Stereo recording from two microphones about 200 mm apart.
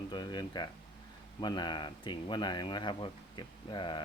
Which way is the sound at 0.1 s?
20° left (ahead or behind).